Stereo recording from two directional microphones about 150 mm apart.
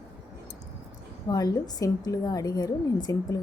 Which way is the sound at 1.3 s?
25° left (ahead or behind).